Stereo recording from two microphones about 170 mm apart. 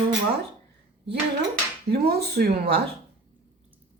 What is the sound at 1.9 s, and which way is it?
Speech, 70° right (ahead or behind).